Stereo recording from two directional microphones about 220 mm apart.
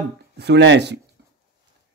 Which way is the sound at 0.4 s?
50° right (ahead or behind).